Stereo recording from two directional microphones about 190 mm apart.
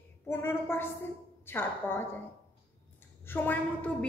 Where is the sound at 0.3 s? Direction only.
10° left (ahead or behind).